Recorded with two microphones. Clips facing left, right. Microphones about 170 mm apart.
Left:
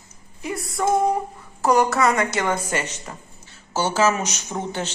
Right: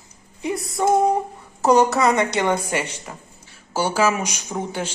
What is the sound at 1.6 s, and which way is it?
Speech, 20° right (ahead or behind).